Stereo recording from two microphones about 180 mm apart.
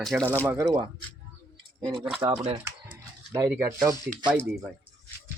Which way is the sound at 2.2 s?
20° right (ahead or behind).